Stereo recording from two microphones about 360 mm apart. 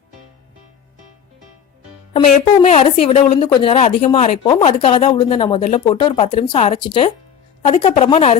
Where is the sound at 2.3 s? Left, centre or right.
Centre.